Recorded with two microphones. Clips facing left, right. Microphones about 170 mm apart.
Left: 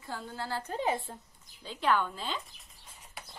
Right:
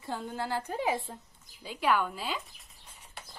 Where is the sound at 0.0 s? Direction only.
20° right (ahead or behind).